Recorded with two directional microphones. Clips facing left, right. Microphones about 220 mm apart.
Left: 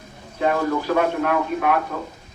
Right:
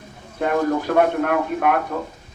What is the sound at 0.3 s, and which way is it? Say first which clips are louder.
A man's voice: right 1 dB; 50° right (ahead or behind).